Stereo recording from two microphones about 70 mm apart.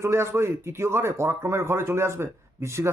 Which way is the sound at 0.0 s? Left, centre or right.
Right.